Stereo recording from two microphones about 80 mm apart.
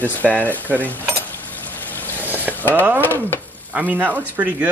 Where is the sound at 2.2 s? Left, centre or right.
Right.